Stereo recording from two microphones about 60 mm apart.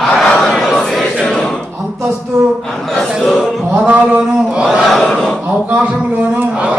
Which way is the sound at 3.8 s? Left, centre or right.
Centre.